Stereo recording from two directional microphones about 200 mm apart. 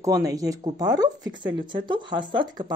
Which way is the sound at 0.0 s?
15° right (ahead or behind).